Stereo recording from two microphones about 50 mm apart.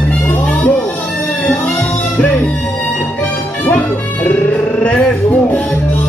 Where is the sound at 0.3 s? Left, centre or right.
Left.